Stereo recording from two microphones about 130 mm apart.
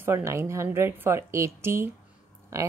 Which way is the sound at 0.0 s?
20° right (ahead or behind).